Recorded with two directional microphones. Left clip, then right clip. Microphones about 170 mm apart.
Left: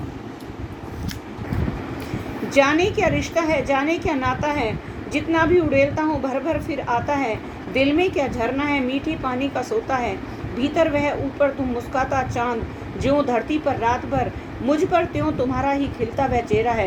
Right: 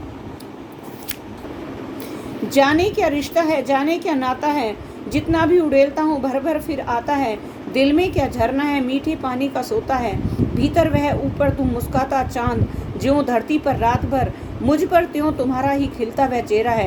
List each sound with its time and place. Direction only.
2.5 s a woman's voice: 55° right (ahead or behind)